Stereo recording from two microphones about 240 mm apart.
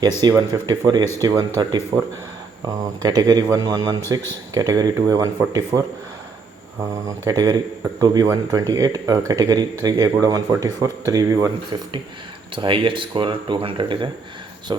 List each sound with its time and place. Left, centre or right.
0.2 s speech: centre
7.3 s speech: centre